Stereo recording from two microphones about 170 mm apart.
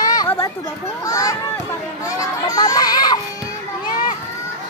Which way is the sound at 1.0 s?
20° left (ahead or behind).